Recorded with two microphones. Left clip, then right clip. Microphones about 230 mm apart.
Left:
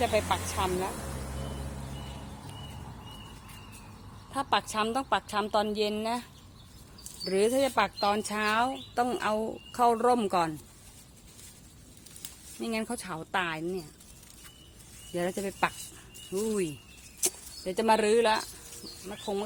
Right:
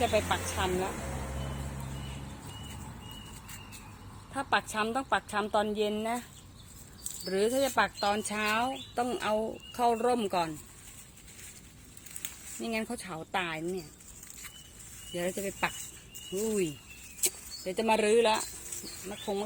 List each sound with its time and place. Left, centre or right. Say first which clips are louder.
0.0 s a woman's voice: left 1 dB; centre
4.3 s a woman's voice: left 1 dB; centre
7.3 s speech: left 2 dB; centre
12.6 s speech: left 1 dB; centre
15.1 s speech: left 2 dB; centre